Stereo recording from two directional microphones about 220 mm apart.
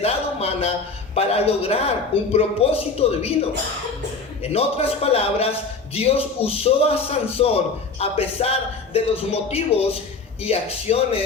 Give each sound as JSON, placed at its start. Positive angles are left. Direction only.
{"t": 0.0, "sound": "a sound", "side_deg": 25}
{"t": 1.1, "sound": "a man's voice", "side_deg": 25}
{"t": 4.4, "sound": "a man's voice", "side_deg": 25}